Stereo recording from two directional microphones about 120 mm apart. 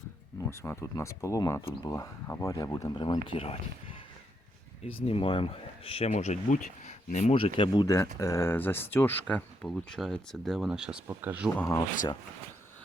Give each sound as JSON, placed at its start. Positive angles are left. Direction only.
{"t": 0.3, "sound": "speech", "side_deg": 20}
{"t": 2.9, "sound": "speech", "side_deg": 45}
{"t": 4.8, "sound": "speech", "side_deg": 50}
{"t": 6.1, "sound": "speech", "side_deg": 80}
{"t": 7.3, "sound": "speech", "side_deg": 50}
{"t": 11.0, "sound": "speech", "side_deg": -20}
{"t": 11.5, "sound": "speech", "side_deg": 20}